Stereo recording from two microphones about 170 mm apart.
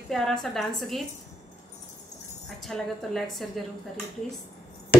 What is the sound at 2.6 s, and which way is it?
A woman's voice, centre (ahead or behind).